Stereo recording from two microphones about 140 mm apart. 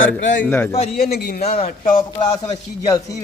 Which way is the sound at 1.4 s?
50° left (ahead or behind).